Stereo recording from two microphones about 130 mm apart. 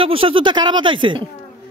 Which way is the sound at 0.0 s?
45° right (ahead or behind).